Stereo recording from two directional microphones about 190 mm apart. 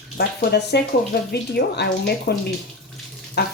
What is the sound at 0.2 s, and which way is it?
Speech, 60° left (ahead or behind).